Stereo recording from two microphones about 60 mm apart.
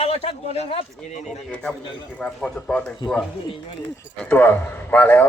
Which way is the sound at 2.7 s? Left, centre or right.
Left.